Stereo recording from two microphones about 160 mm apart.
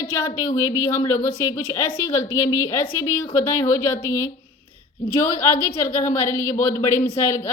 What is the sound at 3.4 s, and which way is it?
Speech, 15° left (ahead or behind).